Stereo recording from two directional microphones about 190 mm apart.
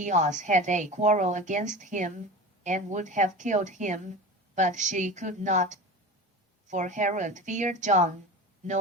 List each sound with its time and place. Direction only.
0.0 s a woman's voice: 40° right (ahead or behind)